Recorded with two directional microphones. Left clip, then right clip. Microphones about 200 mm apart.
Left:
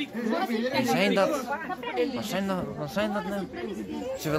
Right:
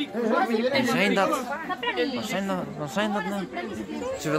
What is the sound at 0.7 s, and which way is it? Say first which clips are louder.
A man's voice: right 2 dB; 5° left (ahead or behind).